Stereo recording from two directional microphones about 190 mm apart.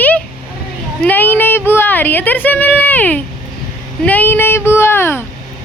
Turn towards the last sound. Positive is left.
turn(degrees=10)  # may be behind; listen again after turning